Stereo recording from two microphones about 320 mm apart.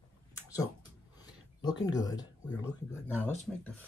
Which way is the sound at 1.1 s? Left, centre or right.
Centre.